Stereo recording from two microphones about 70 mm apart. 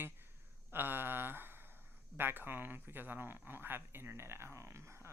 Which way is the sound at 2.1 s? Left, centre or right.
Right.